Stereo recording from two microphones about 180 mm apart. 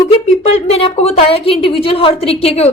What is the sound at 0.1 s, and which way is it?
A woman's voice, 35° left (ahead or behind).